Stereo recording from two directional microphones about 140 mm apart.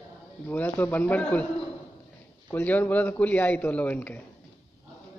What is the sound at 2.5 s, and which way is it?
A man's voice, 15° left (ahead or behind).